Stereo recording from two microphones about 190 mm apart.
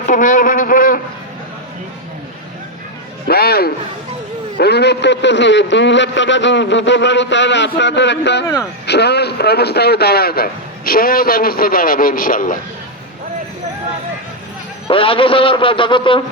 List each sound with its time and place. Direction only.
0.1 s a man's voice: 45° left (ahead or behind)
3.2 s a man's voice: 55° left (ahead or behind)
14.8 s a man's voice: 30° left (ahead or behind)